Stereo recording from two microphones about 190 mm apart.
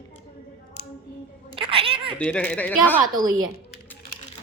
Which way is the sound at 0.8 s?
60° left (ahead or behind).